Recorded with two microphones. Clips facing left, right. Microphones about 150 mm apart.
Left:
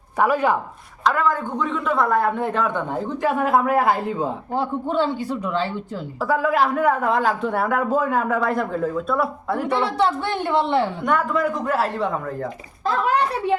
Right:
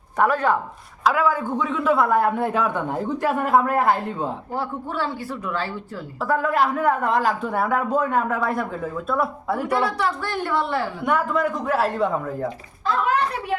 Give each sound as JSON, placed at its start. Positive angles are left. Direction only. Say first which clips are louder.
{"t": 0.2, "sound": "speech", "louder": "left 1 dB", "side_deg": 10}
{"t": 1.0, "sound": "speech", "louder": "even", "side_deg": -5}
{"t": 4.5, "sound": "a woman's voice", "louder": "left 9 dB", "side_deg": 20}
{"t": 6.1, "sound": "speech", "louder": "left 1 dB", "side_deg": 0}
{"t": 9.8, "sound": "a woman's voice", "louder": "left 3 dB", "side_deg": 25}
{"t": 11.0, "sound": "speech", "louder": "left 1 dB", "side_deg": -5}